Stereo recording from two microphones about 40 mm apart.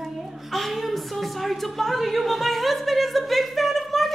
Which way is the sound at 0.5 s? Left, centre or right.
Centre.